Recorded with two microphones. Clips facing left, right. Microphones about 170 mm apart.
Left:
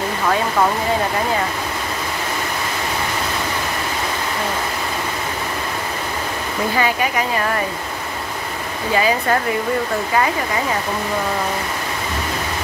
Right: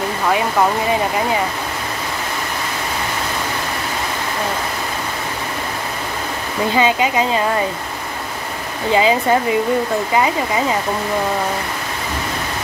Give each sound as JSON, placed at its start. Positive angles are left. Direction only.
{"t": 6.8, "sound": "speech", "side_deg": -20}
{"t": 8.9, "sound": "speech", "side_deg": -20}